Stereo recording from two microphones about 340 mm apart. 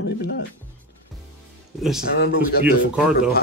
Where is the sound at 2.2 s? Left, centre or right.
Left.